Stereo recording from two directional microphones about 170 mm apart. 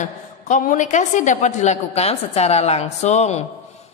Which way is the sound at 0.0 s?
45° left (ahead or behind).